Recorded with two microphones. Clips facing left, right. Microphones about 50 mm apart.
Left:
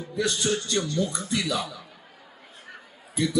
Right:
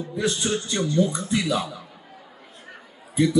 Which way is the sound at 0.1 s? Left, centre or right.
Right.